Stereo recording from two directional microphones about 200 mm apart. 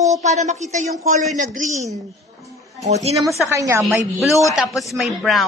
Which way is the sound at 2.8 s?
35° right (ahead or behind).